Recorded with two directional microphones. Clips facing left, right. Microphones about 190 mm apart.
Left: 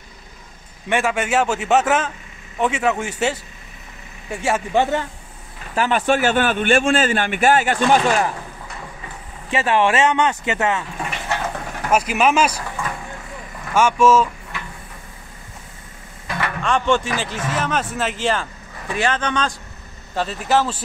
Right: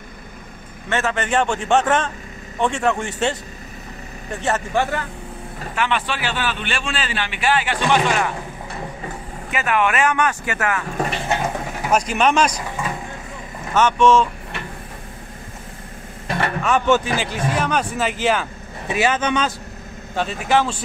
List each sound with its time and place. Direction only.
0.8 s a man's voice: 10° left (ahead or behind)
5.8 s speech: 40° left (ahead or behind)
9.5 s speech: 30° left (ahead or behind)
11.2 s a sound: 15° right (ahead or behind)
11.9 s speech: 5° left (ahead or behind)
13.7 s a man's voice: 10° left (ahead or behind)
16.3 s vehicle: 35° right (ahead or behind)
16.6 s speech: 5° right (ahead or behind)
20.4 s speech: 5° left (ahead or behind)